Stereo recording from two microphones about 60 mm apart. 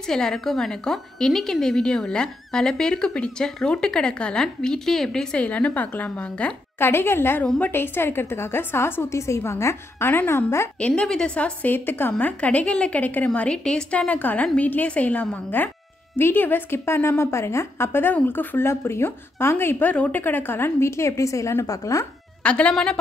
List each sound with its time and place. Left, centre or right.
0.0 s a woman's voice: centre
6.8 s a woman's voice: left
10.0 s a woman's voice: left
10.8 s a woman's voice: left
11.6 s a woman's voice: left
12.3 s a woman's voice: left
18.7 s a woman's voice: left
19.9 s a woman's voice: left
20.9 s a woman's voice: left
22.4 s a woman's voice: left